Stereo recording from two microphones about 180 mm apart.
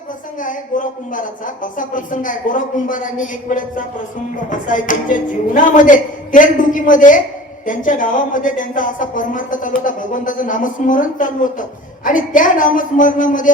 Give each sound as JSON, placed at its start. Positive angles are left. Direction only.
{"t": 0.4, "sound": "a woman's voice", "side_deg": 45}